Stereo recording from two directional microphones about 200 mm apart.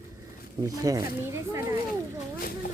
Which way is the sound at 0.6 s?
15° right (ahead or behind).